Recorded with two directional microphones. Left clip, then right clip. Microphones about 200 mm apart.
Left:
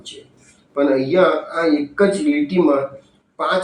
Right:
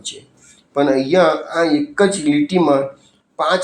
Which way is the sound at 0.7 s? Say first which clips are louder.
Right 2 dB; 50° right (ahead or behind).